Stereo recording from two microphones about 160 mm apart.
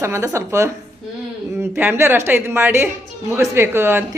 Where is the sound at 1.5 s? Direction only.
15° right (ahead or behind).